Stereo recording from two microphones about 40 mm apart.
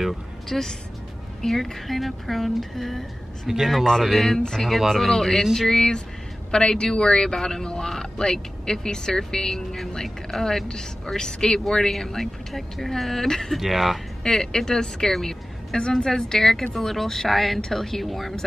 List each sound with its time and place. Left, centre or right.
0.5 s a woman's voice: centre
3.4 s speech: centre
3.8 s a woman's voice: centre
14.2 s a woman's voice: centre